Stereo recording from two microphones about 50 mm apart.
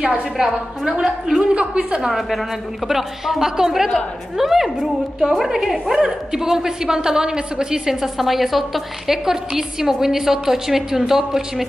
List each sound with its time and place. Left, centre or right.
0.4 s a woman's voice: centre
1.5 s a woman's voice: right
2.1 s a woman's voice: centre